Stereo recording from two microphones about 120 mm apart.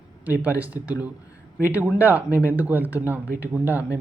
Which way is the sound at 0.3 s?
15° right (ahead or behind).